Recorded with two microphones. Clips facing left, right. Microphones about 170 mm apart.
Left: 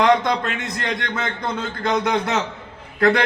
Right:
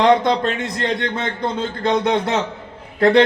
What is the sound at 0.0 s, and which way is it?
A man's voice, 30° right (ahead or behind).